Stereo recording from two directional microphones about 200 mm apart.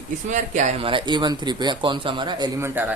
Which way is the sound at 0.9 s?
25° right (ahead or behind).